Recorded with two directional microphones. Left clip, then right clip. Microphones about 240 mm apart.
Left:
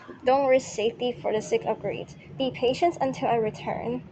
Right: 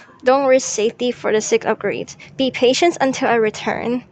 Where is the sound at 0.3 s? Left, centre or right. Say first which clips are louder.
Right 7 dB; right.